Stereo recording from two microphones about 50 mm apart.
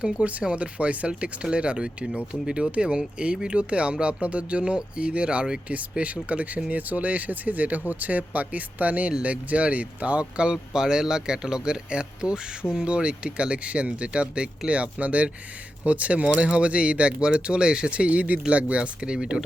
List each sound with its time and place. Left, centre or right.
0.0 s speech: right